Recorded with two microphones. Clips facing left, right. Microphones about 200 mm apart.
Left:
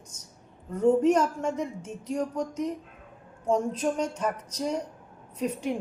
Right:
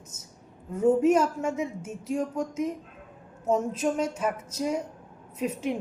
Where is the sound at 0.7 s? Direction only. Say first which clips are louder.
Even; 5° right (ahead or behind).